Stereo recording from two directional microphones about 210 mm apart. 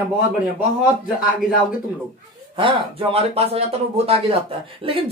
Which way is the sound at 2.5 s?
25° right (ahead or behind).